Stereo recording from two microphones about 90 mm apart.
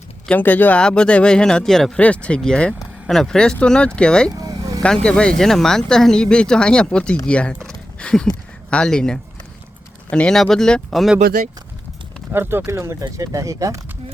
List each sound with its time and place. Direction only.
0.3 s speech: 20° left (ahead or behind); by 1.9 s 5° left (ahead or behind)
2.0 s speech: 15° left (ahead or behind)
12.3 s speech: 25° right (ahead or behind)